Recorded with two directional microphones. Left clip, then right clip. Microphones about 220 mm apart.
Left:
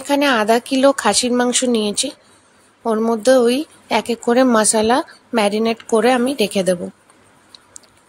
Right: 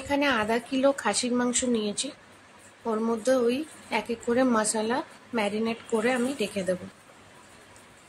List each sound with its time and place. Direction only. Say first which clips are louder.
0.1 s a woman's voice: left 10 dB; 45° left (ahead or behind)